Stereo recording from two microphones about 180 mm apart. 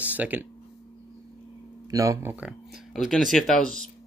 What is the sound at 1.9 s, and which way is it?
Speech, 15° right (ahead or behind).